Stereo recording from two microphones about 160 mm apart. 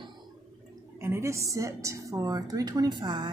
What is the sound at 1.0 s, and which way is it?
A woman's voice, 15° right (ahead or behind).